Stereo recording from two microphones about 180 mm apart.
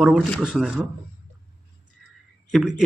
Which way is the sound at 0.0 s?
5° right (ahead or behind).